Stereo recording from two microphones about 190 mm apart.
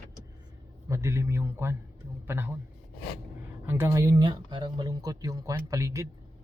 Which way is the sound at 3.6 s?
15° right (ahead or behind).